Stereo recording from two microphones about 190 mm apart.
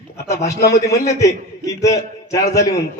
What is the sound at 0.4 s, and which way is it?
A man's voice, 15° left (ahead or behind).